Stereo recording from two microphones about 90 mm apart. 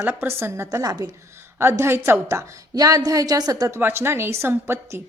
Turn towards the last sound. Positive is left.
turn(degrees=-30)  # may be behind; listen again after turning